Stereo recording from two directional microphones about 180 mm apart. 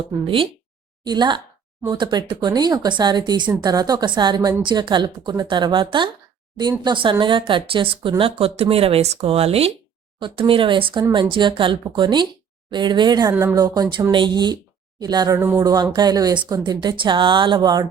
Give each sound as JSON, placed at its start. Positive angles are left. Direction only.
{"t": 0.1, "sound": "a woman's voice", "side_deg": -30}